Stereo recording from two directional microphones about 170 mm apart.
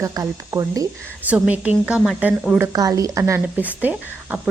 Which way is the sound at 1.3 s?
10° right (ahead or behind).